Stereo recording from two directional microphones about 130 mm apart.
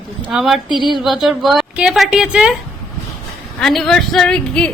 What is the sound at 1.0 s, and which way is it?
A woman's voice, centre (ahead or behind).